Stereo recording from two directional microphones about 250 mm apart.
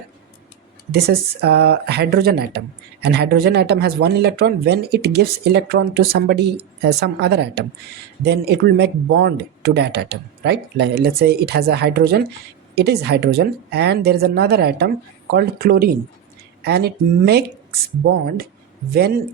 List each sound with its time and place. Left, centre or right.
0.9 s speech: right